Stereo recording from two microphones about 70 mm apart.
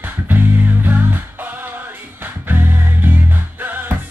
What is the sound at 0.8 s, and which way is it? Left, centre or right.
Music, right.